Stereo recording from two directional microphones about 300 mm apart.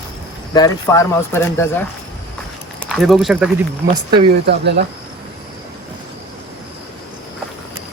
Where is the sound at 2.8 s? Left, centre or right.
Centre.